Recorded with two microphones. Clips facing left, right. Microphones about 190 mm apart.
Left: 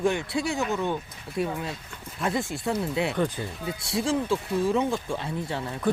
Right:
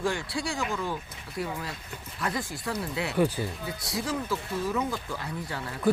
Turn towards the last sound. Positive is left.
turn(degrees=25)  # may be behind; listen again after turning